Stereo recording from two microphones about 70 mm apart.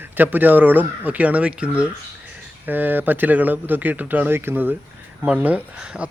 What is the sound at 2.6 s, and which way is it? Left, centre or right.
Speech, right.